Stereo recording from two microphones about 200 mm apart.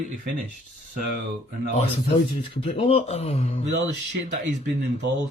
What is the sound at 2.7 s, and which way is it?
Speech, 30° left (ahead or behind).